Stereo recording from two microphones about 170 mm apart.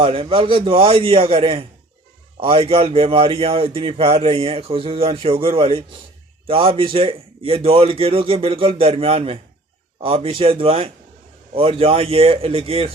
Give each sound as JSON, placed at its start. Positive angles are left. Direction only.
{"t": 0.0, "sound": "speech", "side_deg": -35}